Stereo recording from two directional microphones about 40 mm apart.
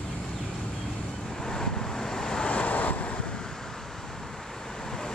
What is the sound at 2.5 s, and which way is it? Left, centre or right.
Vehicle, left.